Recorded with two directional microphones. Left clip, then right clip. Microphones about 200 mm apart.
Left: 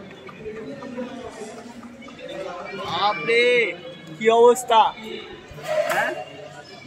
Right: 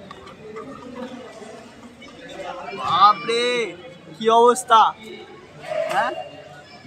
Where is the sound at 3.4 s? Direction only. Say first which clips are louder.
Left 4 dB; 60° right (ahead or behind).